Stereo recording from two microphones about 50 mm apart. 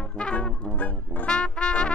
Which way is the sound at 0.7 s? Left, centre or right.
Left.